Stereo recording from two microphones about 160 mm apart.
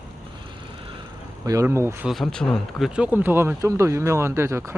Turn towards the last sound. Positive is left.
turn(degrees=-15)  # may be behind; listen again after turning